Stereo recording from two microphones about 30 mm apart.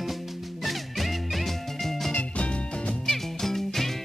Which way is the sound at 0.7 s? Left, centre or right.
Centre.